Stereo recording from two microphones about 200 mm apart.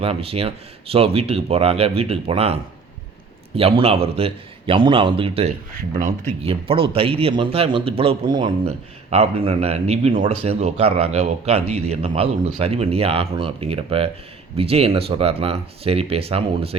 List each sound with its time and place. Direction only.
0.0 s a man's voice: 30° right (ahead or behind)